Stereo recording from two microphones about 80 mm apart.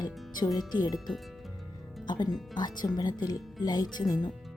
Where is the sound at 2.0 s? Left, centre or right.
Left.